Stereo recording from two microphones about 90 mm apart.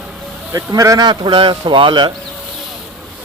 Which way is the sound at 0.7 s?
40° right (ahead or behind).